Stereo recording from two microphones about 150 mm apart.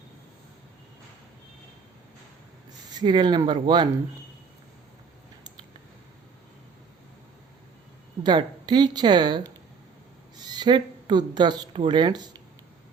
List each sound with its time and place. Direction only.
3.0 s speech: 30° right (ahead or behind)
8.2 s speech: 30° right (ahead or behind)